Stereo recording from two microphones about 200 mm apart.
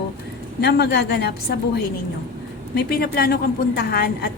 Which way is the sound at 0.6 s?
55° left (ahead or behind).